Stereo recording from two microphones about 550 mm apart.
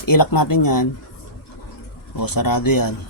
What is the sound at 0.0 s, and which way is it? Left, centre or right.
Speech, left.